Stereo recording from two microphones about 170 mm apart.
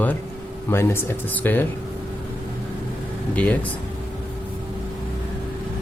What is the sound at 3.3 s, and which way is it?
Speech, 10° left (ahead or behind).